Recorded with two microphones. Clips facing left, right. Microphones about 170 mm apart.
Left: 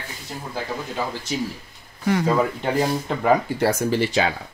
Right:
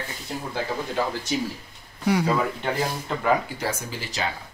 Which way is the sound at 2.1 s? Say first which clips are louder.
Left 1 dB; 10° right (ahead or behind).